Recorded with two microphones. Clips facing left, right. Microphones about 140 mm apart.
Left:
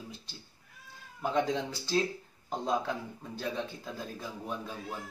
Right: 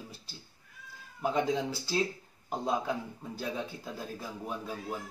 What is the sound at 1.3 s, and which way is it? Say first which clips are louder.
Speech: left 1 dB; 5° right (ahead or behind).